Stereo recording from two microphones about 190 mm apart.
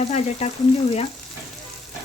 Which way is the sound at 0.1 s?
35° left (ahead or behind).